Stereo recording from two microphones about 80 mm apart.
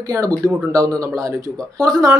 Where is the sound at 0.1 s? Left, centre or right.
Right.